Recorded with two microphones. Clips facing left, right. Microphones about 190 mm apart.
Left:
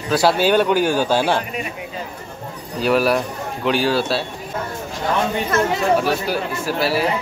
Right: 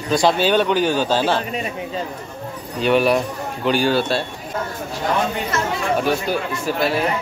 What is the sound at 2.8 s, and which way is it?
Speech, centre (ahead or behind).